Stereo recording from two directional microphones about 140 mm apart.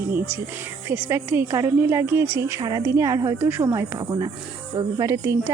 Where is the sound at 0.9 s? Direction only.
15° right (ahead or behind).